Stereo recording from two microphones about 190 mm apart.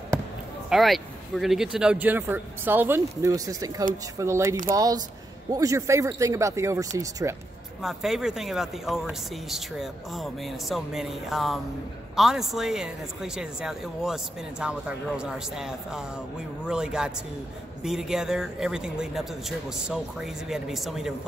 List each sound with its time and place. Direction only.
0.7 s speech: centre (ahead or behind); by 7.3 s 15° right (ahead or behind)
7.8 s speech: centre (ahead or behind)